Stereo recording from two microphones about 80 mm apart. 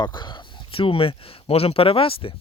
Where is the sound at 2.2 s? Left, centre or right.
Left.